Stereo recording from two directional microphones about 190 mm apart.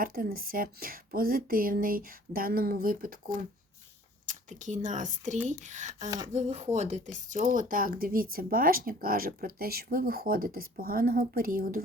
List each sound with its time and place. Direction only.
0.0 s speech: 50° right (ahead or behind)
4.3 s speech: 40° right (ahead or behind)